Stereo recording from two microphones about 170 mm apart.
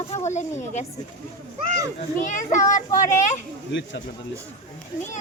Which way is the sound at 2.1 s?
50° left (ahead or behind).